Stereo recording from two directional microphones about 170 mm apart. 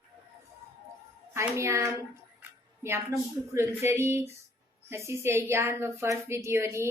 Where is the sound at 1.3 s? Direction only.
15° right (ahead or behind).